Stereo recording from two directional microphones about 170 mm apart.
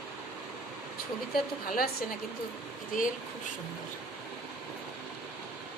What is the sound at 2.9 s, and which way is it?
Speech, 50° left (ahead or behind).